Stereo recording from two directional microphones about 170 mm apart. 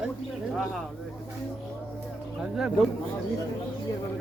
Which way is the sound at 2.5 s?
5° right (ahead or behind).